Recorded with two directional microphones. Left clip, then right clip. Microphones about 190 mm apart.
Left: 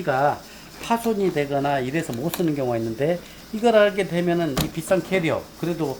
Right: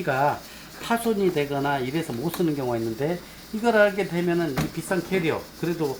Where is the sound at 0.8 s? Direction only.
15° left (ahead or behind); by 5.7 s 40° left (ahead or behind).